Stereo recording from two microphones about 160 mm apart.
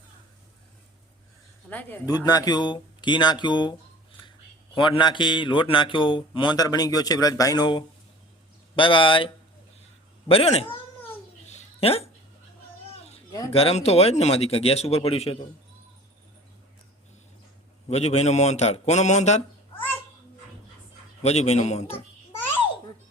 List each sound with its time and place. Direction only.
1.7 s speech: 10° left (ahead or behind)
2.0 s speech: 25° left (ahead or behind); by 10.8 s 40° left (ahead or behind)
11.4 s a sound: 40° left (ahead or behind)
13.5 s speech: 40° left (ahead or behind)
17.8 s a man's voice: 40° left (ahead or behind)
21.2 s speech: 40° left (ahead or behind)